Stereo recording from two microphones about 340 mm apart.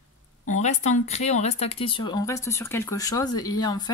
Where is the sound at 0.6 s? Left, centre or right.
Centre.